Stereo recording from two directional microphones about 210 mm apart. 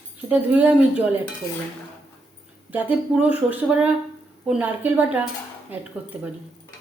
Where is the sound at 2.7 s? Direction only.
10° right (ahead or behind).